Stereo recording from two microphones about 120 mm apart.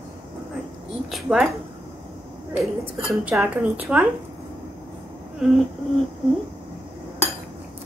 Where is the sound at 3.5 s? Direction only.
10° right (ahead or behind).